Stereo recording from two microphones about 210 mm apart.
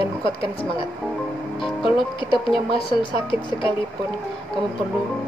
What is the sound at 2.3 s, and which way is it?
Speech, centre (ahead or behind).